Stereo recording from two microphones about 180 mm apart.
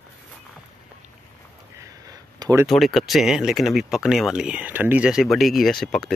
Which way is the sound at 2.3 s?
20° right (ahead or behind).